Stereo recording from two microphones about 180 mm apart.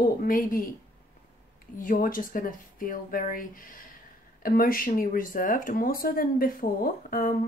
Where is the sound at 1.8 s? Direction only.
50° left (ahead or behind).